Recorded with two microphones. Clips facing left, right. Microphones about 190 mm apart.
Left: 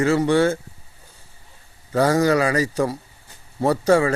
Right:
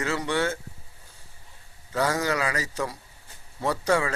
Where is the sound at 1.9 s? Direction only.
35° left (ahead or behind).